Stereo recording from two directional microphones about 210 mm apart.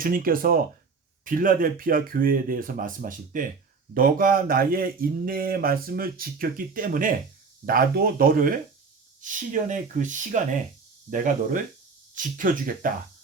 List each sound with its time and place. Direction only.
0.0 s speech: 40° right (ahead or behind)